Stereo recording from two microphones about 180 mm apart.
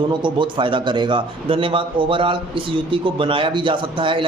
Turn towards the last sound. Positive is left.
turn(degrees=-30)  # may be behind; listen again after turning